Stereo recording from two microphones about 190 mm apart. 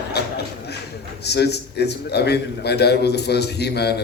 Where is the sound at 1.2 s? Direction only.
60° left (ahead or behind).